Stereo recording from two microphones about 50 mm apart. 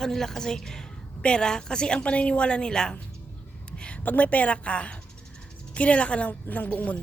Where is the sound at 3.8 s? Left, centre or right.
Left.